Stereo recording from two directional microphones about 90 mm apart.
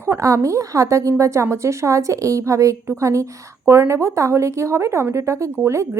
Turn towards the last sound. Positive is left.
turn(degrees=-30)  # may be behind; listen again after turning